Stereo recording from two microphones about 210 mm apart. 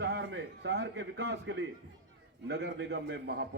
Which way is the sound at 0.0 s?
55° right (ahead or behind).